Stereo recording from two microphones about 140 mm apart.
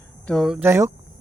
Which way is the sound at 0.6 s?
20° right (ahead or behind).